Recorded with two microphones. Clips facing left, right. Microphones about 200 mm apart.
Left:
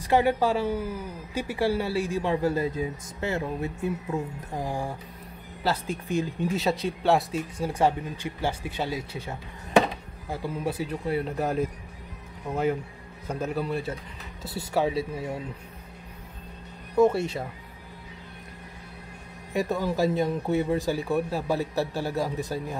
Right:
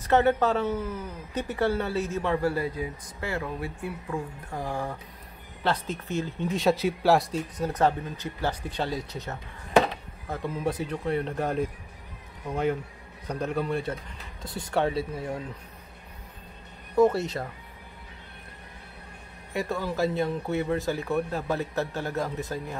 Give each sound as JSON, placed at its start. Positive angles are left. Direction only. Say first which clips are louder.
{"t": 0.0, "sound": "speech", "louder": "even", "side_deg": 10}
{"t": 6.5, "sound": "speech", "louder": "right 5 dB", "side_deg": 0}
{"t": 13.3, "sound": "a man's voice", "louder": "even", "side_deg": 5}
{"t": 17.2, "sound": "speech", "louder": "left 1 dB", "side_deg": 10}
{"t": 19.5, "sound": "speech", "louder": "left 3 dB", "side_deg": 15}